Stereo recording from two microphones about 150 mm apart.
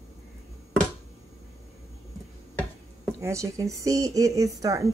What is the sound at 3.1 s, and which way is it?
Speech, 20° right (ahead or behind).